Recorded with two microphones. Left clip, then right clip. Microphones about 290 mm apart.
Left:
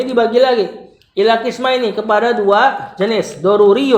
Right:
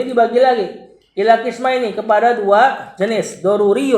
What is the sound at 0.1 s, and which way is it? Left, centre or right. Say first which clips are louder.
A man's voice: even; left.